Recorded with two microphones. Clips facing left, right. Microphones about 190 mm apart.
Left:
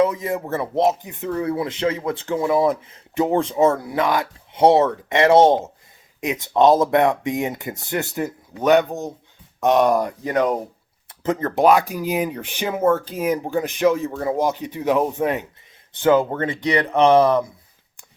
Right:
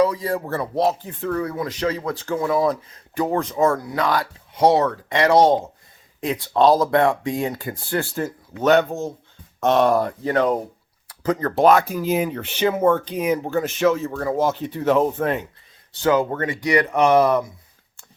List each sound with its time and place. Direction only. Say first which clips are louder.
0.0 s speech: even; 20° left (ahead or behind)
11.6 s speech: even; 10° left (ahead or behind)
16.0 s speech: left 2 dB; 25° left (ahead or behind)